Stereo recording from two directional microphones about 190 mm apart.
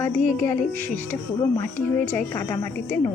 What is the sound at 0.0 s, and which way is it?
Speech, 10° left (ahead or behind).